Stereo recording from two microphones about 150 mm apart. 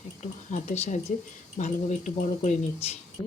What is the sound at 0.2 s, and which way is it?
Speech, 50° left (ahead or behind).